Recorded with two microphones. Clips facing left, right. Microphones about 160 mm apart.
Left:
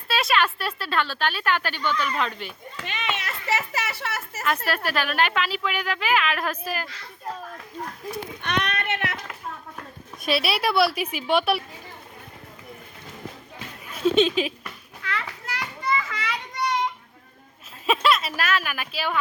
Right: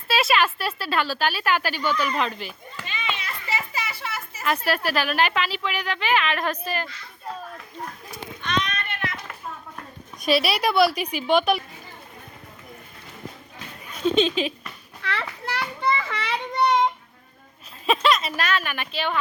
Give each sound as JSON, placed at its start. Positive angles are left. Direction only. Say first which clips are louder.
{"t": 0.1, "sound": "speech", "louder": "right 2 dB", "side_deg": -5}
{"t": 2.8, "sound": "a sound", "louder": "left 1 dB", "side_deg": 75}
{"t": 4.4, "sound": "speech", "louder": "right 2 dB", "side_deg": 0}
{"t": 8.4, "sound": "a sound", "louder": "right 1 dB", "side_deg": 65}
{"t": 10.2, "sound": "speech", "louder": "right 2 dB", "side_deg": 0}
{"t": 14.0, "sound": "speech", "louder": "left 1 dB", "side_deg": 5}
{"t": 15.0, "sound": "children playing", "louder": "right 3 dB", "side_deg": -30}
{"t": 17.8, "sound": "speech", "louder": "right 1 dB", "side_deg": 0}